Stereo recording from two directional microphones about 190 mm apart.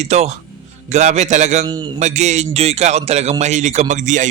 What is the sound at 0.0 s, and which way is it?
Speech, 35° right (ahead or behind).